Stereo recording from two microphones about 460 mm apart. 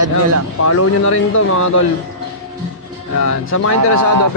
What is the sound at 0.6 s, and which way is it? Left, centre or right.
Speech, left.